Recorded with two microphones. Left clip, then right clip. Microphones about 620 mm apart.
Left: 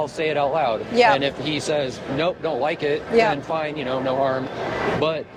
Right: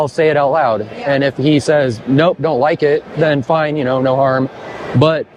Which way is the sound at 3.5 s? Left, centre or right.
Right.